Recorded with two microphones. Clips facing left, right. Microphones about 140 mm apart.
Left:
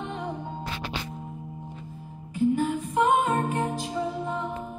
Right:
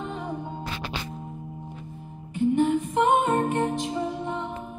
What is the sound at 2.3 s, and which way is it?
Music, 25° right (ahead or behind).